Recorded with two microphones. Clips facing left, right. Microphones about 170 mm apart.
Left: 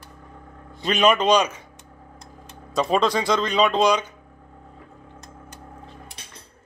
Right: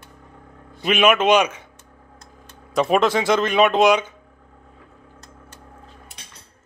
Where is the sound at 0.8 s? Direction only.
10° right (ahead or behind).